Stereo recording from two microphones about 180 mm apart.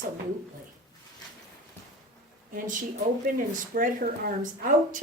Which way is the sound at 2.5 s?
50° right (ahead or behind).